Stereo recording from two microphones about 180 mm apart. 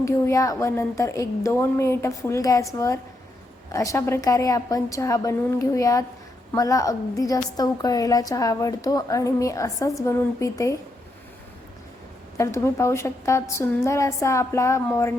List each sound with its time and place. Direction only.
0.0 s a woman's voice: 15° left (ahead or behind)
12.4 s speech: 15° left (ahead or behind)